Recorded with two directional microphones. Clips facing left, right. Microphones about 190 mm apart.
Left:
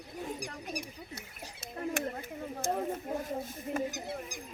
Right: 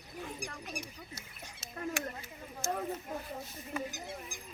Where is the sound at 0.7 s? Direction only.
55° left (ahead or behind).